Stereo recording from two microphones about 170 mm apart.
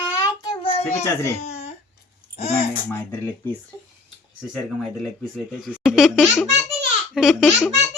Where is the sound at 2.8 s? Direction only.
15° left (ahead or behind).